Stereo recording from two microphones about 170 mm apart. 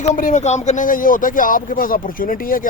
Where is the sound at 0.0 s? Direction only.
45° left (ahead or behind).